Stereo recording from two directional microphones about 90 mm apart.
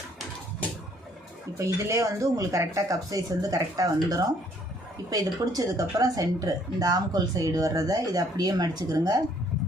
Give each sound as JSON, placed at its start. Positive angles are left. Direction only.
{"t": 1.5, "sound": "speech", "side_deg": -35}